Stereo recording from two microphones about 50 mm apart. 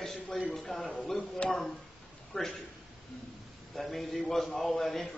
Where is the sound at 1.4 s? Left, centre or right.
Left.